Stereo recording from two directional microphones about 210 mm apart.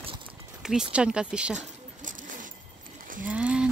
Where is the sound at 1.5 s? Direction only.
40° right (ahead or behind).